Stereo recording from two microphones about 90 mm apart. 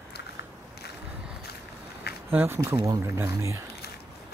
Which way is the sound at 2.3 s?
25° right (ahead or behind).